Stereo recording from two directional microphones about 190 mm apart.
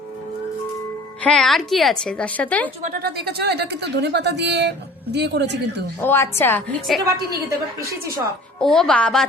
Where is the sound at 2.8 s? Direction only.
50° right (ahead or behind).